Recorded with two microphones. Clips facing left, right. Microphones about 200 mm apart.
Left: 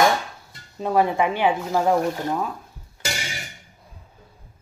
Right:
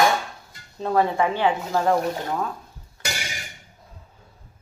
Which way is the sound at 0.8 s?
15° left (ahead or behind).